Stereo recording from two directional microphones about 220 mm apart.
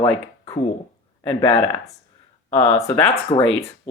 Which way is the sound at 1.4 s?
25° left (ahead or behind).